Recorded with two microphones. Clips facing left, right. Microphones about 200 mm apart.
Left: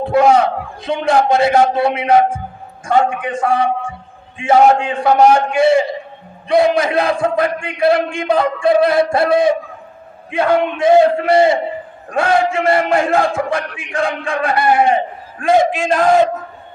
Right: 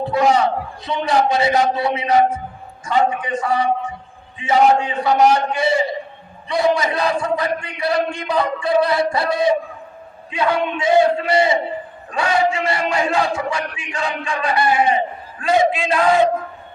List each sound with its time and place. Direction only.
0.0 s a man's voice: 50° left (ahead or behind)